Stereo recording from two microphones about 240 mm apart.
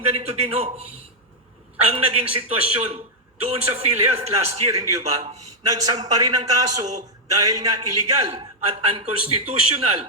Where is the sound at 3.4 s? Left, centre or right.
Right.